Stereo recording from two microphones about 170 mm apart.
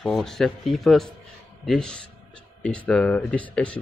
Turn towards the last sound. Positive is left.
turn(degrees=5)  # may be behind; listen again after turning